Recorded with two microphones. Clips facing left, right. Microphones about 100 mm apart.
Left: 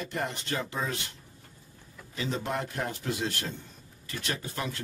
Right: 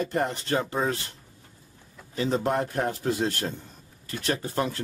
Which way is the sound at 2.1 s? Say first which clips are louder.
Right 7 dB; 40° right (ahead or behind).